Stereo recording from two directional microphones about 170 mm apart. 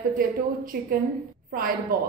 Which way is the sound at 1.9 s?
60° right (ahead or behind).